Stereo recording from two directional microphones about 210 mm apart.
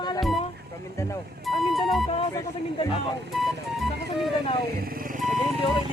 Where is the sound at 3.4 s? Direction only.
Centre (ahead or behind).